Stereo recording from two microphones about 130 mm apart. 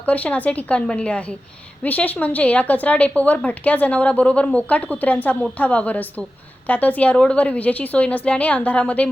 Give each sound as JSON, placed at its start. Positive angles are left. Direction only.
{"t": 0.0, "sound": "a woman's voice", "side_deg": 10}